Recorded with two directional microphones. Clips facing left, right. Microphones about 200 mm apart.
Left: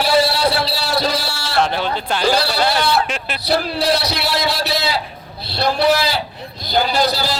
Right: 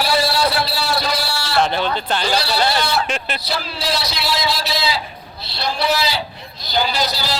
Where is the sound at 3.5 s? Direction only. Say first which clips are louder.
Left 9 dB; 60° left (ahead or behind).